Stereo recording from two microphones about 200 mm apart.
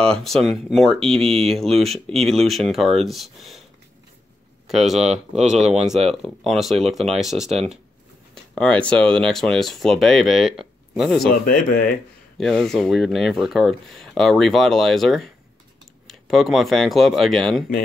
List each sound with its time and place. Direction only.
0.0 s speech: 5° left (ahead or behind)
4.6 s speech: centre (ahead or behind)
11.4 s speech: 45° left (ahead or behind)
12.4 s speech: centre (ahead or behind)